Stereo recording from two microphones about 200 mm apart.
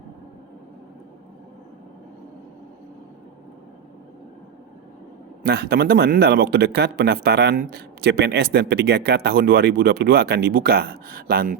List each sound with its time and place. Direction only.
5.4 s speech: 50° right (ahead or behind)